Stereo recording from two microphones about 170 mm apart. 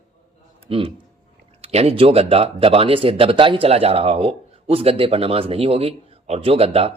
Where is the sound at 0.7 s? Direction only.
35° right (ahead or behind).